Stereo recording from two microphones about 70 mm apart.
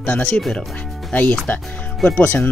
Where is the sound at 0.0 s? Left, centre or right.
Left.